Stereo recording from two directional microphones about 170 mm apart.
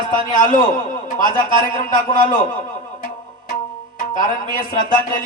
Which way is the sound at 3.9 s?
50° left (ahead or behind).